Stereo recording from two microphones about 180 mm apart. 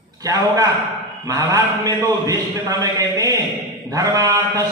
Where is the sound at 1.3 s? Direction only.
20° right (ahead or behind).